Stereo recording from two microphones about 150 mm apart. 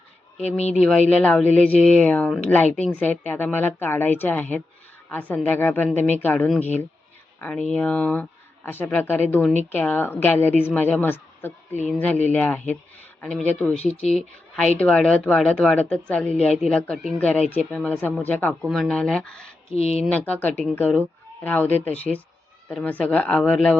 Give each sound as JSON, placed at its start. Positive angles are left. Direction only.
{"t": 0.5, "sound": "speech", "side_deg": 45}
{"t": 0.8, "sound": "a woman's voice", "side_deg": 5}
{"t": 19.7, "sound": "speech", "side_deg": 45}
{"t": 20.1, "sound": "speech", "side_deg": 10}